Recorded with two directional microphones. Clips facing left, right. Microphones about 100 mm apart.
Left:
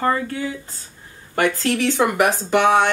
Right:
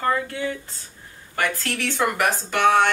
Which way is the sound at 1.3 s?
20° left (ahead or behind).